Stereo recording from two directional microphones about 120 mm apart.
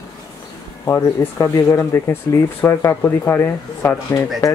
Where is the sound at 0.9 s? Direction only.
20° left (ahead or behind).